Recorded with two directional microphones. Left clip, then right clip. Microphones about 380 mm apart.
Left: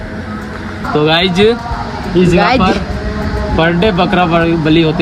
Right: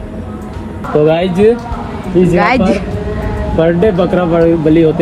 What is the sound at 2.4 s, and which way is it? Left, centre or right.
Speech, centre.